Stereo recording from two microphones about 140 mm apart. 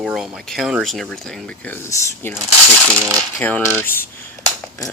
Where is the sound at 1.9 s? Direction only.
15° left (ahead or behind).